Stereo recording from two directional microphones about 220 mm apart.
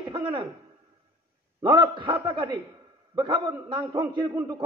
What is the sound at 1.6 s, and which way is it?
A man's voice, 20° right (ahead or behind).